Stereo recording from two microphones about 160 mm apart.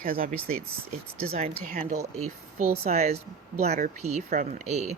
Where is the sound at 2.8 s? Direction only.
45° right (ahead or behind).